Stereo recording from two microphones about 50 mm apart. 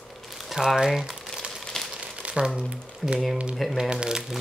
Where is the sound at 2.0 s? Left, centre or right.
Centre.